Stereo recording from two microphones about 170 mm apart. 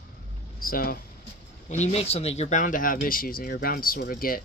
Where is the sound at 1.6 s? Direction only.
40° left (ahead or behind).